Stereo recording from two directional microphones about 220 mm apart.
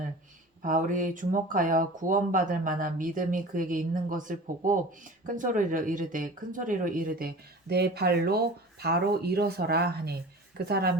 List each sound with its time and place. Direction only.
0.6 s speech: 35° right (ahead or behind)